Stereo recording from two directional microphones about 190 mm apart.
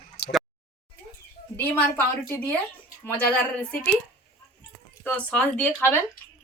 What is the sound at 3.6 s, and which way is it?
Speech, 5° left (ahead or behind).